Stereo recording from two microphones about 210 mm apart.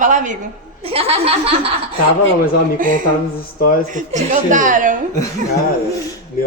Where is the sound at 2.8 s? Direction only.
40° right (ahead or behind).